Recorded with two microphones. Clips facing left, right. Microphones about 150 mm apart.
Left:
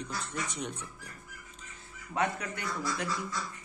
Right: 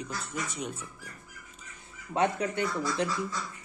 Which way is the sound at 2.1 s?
25° right (ahead or behind).